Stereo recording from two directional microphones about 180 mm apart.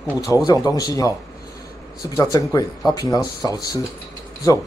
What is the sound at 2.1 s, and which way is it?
Speech, 20° left (ahead or behind).